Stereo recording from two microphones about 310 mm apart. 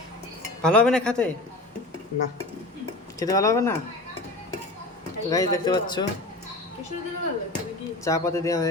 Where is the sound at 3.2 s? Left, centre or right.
Centre.